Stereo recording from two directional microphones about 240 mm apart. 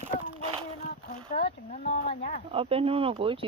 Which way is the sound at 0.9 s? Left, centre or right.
Left.